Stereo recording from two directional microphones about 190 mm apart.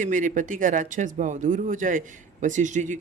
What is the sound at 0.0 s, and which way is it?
Speech, 40° right (ahead or behind).